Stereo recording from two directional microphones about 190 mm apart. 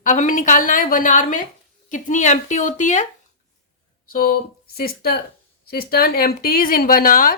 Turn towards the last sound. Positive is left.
turn(degrees=45)  # may be behind; listen again after turning